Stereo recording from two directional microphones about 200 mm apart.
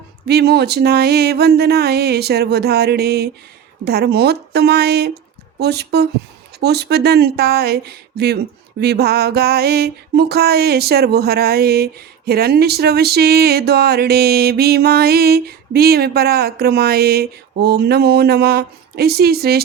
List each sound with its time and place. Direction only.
0.3 s speech: 55° right (ahead or behind)